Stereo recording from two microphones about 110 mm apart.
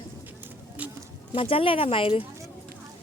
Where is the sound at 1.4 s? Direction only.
55° left (ahead or behind).